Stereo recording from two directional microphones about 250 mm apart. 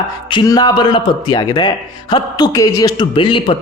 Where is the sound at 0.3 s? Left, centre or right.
Centre.